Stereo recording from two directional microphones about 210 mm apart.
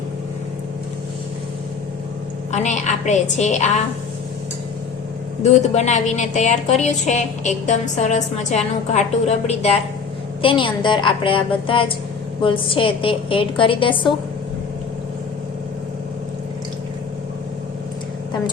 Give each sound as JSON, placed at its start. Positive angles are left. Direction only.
{"t": 2.5, "sound": "a woman's voice", "side_deg": 35}
{"t": 5.4, "sound": "a woman's voice", "side_deg": 35}